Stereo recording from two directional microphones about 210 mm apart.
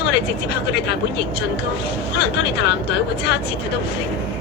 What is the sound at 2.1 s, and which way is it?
Speech, 50° left (ahead or behind).